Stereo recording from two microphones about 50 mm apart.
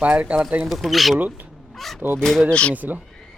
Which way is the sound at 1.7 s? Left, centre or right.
Centre.